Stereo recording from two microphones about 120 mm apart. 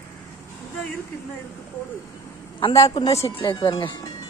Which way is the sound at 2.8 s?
30° left (ahead or behind).